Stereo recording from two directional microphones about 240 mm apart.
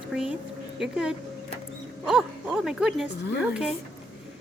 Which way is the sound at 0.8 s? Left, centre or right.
Centre.